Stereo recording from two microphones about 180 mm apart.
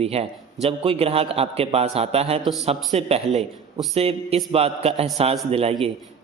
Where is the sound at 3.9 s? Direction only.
35° right (ahead or behind).